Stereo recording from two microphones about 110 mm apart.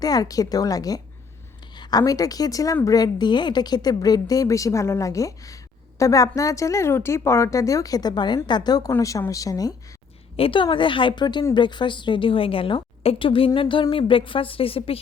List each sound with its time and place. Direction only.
0.0 s a woman's voice: 35° left (ahead or behind)
10.3 s a woman's voice: 55° left (ahead or behind)